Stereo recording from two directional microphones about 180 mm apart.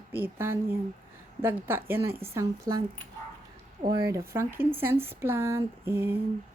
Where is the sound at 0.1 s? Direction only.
10° right (ahead or behind).